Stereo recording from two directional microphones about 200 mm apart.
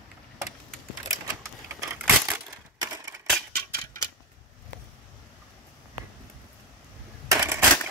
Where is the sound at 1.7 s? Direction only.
10° right (ahead or behind).